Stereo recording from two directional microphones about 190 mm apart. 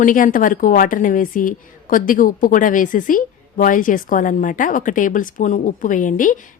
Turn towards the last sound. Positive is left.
turn(degrees=45)  # may be behind; listen again after turning